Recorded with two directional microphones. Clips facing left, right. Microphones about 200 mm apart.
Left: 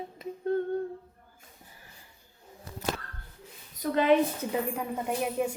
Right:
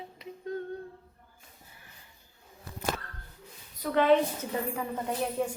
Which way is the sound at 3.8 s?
10° left (ahead or behind).